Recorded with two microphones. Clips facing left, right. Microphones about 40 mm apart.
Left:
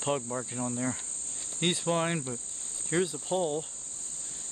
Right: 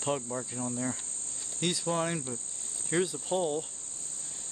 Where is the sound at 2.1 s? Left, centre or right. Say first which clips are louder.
Left 2 dB; centre.